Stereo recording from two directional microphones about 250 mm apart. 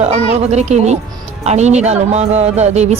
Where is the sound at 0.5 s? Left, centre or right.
Right.